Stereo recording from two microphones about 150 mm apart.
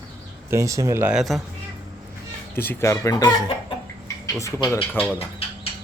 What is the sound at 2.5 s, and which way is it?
Speech, 15° left (ahead or behind).